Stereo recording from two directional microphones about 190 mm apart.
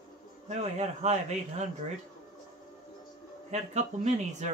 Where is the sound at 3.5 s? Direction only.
35° right (ahead or behind).